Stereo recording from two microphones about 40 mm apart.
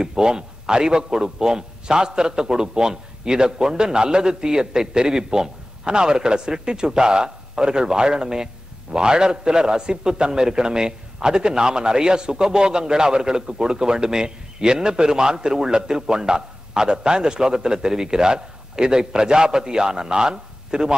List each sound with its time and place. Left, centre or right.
0.0 s a man's voice: centre